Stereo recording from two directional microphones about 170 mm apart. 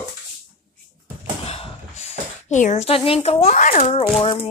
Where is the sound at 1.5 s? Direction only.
35° left (ahead or behind).